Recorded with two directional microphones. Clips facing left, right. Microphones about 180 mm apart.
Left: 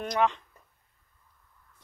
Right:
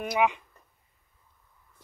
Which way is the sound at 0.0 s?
10° right (ahead or behind).